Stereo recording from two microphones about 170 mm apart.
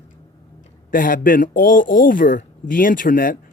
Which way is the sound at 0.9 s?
55° left (ahead or behind).